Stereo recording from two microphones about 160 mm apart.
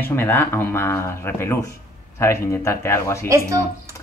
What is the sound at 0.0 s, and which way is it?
Speech, 15° left (ahead or behind).